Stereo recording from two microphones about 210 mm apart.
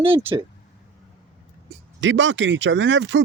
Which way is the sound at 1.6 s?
60° right (ahead or behind).